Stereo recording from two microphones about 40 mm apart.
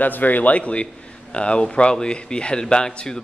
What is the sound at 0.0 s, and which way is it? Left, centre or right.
A man's voice, left.